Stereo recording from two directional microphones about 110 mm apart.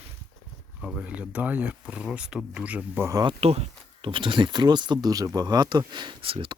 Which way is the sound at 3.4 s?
65° right (ahead or behind).